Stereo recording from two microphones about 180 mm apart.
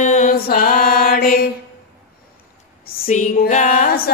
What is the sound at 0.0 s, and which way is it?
Mantra, 40° left (ahead or behind).